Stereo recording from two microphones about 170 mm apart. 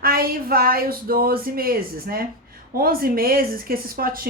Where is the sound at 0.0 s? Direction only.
60° right (ahead or behind).